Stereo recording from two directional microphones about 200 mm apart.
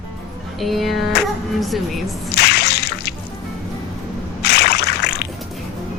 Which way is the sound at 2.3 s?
55° left (ahead or behind).